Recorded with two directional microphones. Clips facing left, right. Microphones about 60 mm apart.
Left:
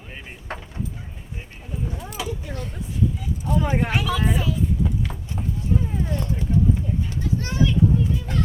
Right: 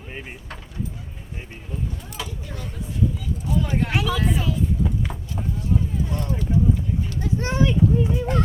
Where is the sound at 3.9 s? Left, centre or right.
Centre.